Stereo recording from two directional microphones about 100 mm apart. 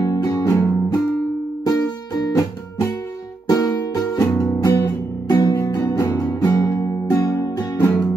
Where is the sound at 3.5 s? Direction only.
30° left (ahead or behind).